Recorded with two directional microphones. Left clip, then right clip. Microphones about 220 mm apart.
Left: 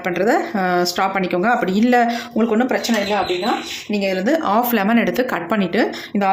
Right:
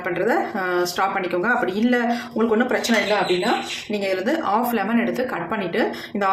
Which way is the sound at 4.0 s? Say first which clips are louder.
Left 4 dB; 30° left (ahead or behind).